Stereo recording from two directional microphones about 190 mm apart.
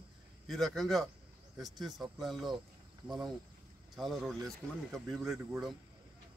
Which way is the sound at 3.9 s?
Centre (ahead or behind).